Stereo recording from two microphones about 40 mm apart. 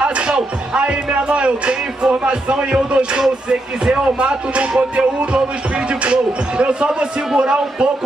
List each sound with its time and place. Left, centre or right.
0.3 s music: right
6.6 s music: right